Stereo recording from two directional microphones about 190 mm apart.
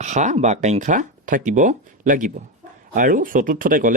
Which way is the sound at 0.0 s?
40° right (ahead or behind).